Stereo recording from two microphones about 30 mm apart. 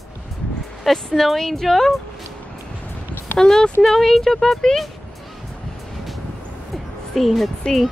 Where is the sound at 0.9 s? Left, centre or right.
Centre.